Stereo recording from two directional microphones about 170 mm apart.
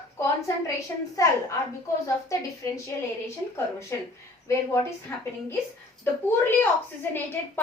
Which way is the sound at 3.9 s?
15° left (ahead or behind).